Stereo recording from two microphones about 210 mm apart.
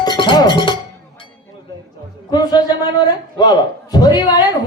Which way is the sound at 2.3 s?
20° left (ahead or behind).